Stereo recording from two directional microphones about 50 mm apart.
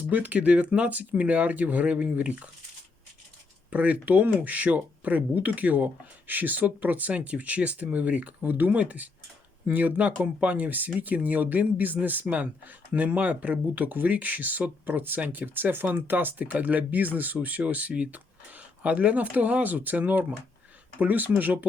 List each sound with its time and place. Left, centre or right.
0.1 s speech: right
3.7 s speech: right